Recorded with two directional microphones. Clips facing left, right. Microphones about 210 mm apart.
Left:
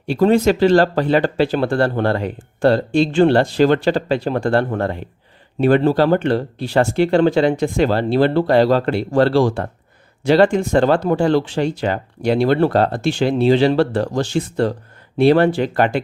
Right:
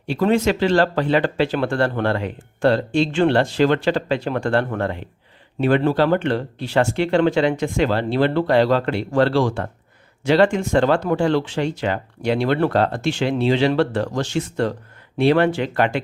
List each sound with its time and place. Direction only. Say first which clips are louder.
0.1 s speech: left 4 dB; 35° left (ahead or behind)